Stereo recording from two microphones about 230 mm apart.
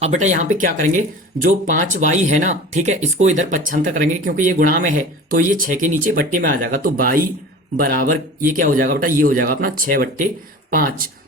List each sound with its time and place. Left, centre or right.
0.0 s speech: right